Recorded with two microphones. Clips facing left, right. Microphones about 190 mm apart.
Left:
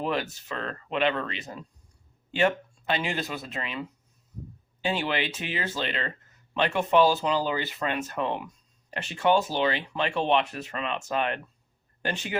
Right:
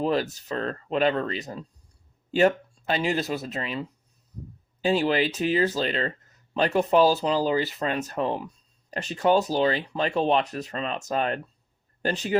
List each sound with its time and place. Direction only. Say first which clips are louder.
0.0 s speech: right 4 dB; 35° right (ahead or behind)